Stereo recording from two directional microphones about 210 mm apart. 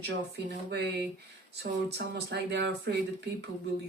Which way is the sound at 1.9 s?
50° right (ahead or behind).